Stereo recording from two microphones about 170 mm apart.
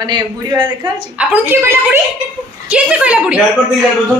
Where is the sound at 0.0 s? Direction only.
25° right (ahead or behind).